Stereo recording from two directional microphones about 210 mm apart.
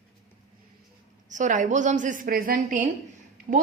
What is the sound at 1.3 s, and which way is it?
A woman's voice, 35° right (ahead or behind).